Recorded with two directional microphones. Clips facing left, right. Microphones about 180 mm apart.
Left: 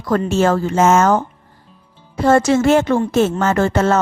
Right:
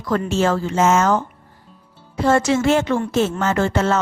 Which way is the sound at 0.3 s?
50° left (ahead or behind).